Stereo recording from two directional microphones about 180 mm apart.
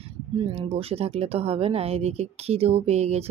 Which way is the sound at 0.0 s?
30° right (ahead or behind).